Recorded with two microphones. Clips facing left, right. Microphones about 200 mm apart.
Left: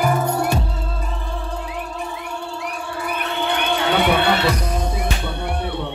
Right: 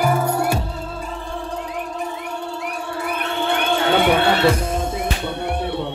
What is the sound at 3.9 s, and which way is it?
Music, 25° right (ahead or behind).